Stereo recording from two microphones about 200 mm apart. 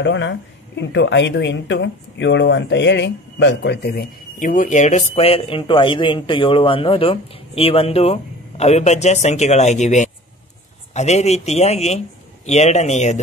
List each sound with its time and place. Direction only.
0.0 s speech: 65° left (ahead or behind); by 13.2 s 35° left (ahead or behind)